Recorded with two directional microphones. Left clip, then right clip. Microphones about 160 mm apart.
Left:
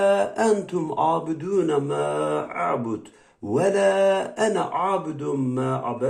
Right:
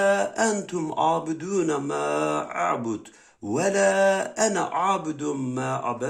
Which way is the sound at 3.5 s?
30° right (ahead or behind).